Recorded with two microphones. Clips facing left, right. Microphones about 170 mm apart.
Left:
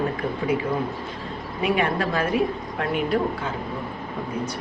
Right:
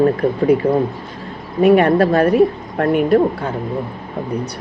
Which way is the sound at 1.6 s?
60° right (ahead or behind).